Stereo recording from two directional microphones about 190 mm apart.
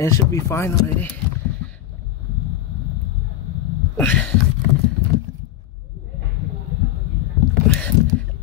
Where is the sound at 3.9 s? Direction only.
10° left (ahead or behind).